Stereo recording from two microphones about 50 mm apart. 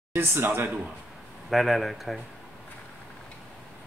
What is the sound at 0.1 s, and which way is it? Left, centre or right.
Speech, right.